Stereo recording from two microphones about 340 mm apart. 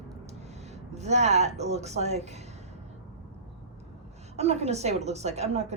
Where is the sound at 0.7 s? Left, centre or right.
Centre.